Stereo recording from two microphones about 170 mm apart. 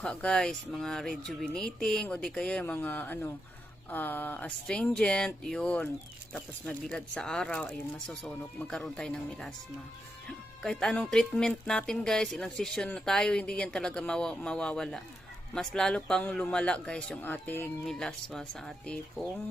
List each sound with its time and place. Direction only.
0.0 s speech: 5° left (ahead or behind)
6.9 s speech: 5° left (ahead or behind)